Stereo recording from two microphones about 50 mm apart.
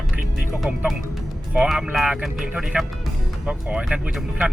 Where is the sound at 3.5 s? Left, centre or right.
Right.